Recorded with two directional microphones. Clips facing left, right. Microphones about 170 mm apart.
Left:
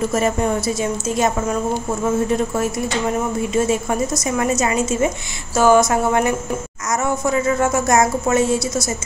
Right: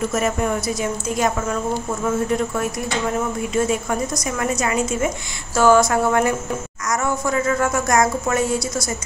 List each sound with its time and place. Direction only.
0.1 s a woman's voice: 30° left (ahead or behind)
3.5 s a woman's voice: 25° left (ahead or behind)